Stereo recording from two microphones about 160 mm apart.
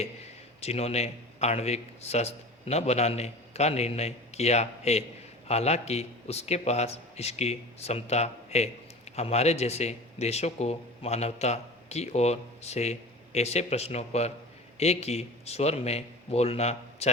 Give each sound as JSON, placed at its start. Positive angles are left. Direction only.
{"t": 0.6, "sound": "speech", "side_deg": 40}